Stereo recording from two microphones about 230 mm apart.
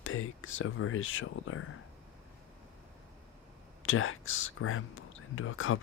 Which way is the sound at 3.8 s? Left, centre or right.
Left.